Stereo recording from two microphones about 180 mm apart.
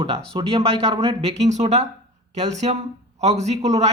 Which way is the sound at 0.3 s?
30° right (ahead or behind).